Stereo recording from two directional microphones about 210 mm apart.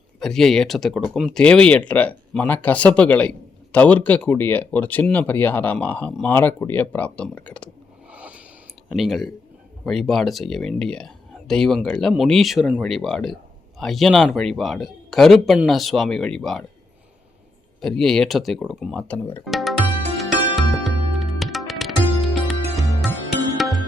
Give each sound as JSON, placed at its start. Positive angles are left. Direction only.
{"t": 0.2, "sound": "speech", "side_deg": 0}
{"t": 8.1, "sound": "a sound", "side_deg": -5}
{"t": 8.9, "sound": "speech", "side_deg": 0}
{"t": 17.7, "sound": "speech", "side_deg": 0}
{"t": 20.6, "sound": "music", "side_deg": 0}